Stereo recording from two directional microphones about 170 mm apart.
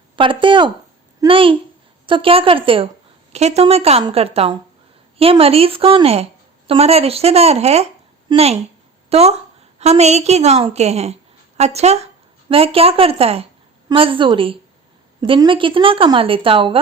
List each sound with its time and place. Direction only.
0.2 s a woman's voice: 30° right (ahead or behind)